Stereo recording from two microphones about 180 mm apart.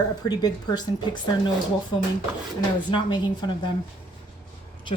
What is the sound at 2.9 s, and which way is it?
Speech, 25° left (ahead or behind).